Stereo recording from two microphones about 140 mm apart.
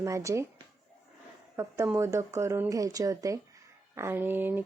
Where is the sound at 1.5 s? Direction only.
20° right (ahead or behind).